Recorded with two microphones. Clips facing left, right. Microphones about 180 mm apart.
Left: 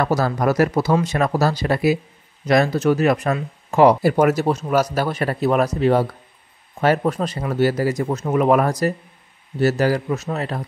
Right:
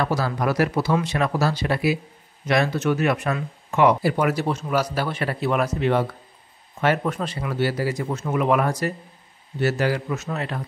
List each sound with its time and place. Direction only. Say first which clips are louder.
0.0 s speech: left 4 dB; 45° left (ahead or behind)